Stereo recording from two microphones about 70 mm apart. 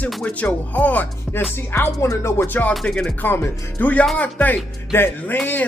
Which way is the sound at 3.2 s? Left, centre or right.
Left.